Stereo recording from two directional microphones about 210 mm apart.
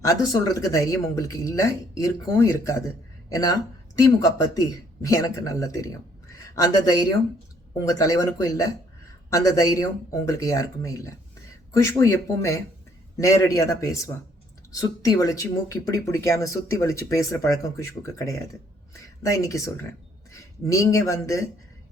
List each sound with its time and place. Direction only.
0.0 s a woman's voice: 15° left (ahead or behind)